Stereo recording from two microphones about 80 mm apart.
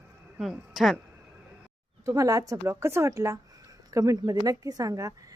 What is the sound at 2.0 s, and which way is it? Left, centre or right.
A woman's voice, right.